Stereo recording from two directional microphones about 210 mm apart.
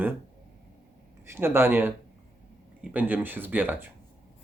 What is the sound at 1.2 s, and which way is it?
Speech, 10° right (ahead or behind).